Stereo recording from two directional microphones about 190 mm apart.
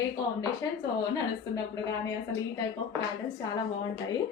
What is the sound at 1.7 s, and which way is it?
Speech, 15° left (ahead or behind).